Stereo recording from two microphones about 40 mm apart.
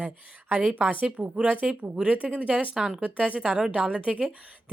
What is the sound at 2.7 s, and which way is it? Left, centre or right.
Speech, centre.